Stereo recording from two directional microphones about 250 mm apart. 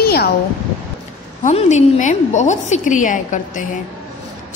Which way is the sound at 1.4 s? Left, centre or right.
Left.